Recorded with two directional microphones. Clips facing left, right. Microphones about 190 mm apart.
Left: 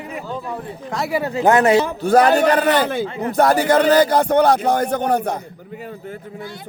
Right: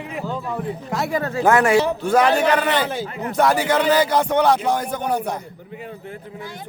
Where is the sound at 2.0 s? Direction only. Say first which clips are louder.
Left 3 dB; 40° left (ahead or behind).